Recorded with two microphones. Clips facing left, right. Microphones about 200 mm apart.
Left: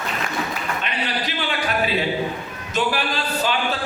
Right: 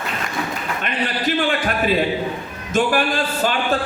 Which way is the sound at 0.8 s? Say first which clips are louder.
Right 4 dB; 50° right (ahead or behind).